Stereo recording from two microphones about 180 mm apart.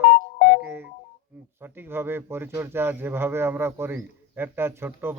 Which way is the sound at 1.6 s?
10° right (ahead or behind).